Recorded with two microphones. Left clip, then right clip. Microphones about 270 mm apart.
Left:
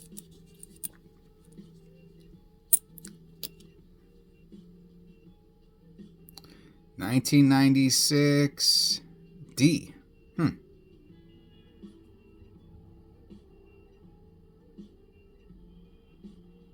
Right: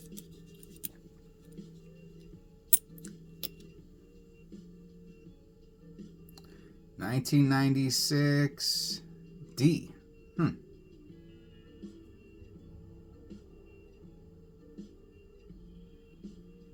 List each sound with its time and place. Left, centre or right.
6.9 s speech: left